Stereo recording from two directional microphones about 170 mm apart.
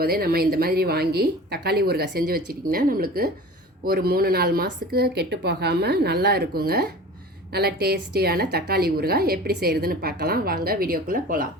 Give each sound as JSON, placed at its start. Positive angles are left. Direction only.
{"t": 0.0, "sound": "a woman's voice", "side_deg": -60}